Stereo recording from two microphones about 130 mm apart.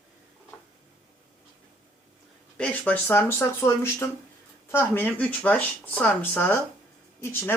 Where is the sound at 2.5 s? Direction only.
10° left (ahead or behind).